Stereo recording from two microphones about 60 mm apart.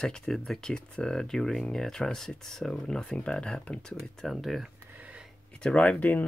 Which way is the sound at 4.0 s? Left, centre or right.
Centre.